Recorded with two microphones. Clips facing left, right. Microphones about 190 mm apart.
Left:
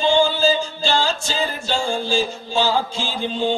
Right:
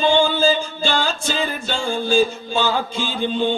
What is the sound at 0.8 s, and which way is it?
Music, 55° right (ahead or behind).